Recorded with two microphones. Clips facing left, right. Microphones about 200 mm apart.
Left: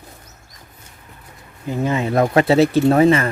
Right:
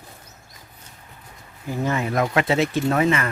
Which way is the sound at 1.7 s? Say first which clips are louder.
Left 4 dB; 20° left (ahead or behind).